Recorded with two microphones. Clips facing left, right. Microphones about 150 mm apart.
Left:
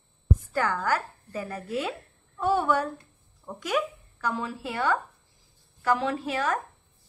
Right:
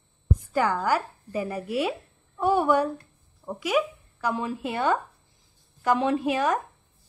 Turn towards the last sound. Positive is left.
turn(degrees=-15)  # may be behind; listen again after turning